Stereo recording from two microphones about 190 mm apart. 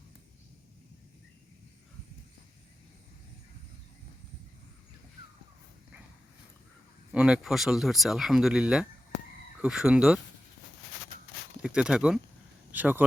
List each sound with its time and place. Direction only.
7.1 s speech: 5° right (ahead or behind)
11.6 s speech: 5° right (ahead or behind)